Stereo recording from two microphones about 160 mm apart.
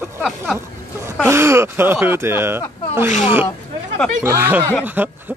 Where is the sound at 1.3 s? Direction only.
15° right (ahead or behind).